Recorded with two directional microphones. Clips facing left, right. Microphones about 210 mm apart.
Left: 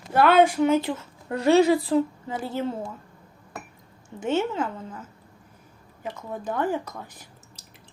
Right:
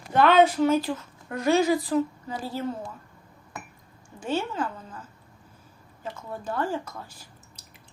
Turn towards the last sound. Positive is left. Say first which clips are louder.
# left 2 dB
turn(degrees=20)  # may be behind; listen again after turning